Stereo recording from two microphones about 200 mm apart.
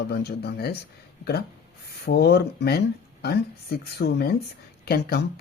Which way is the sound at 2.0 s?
55° left (ahead or behind).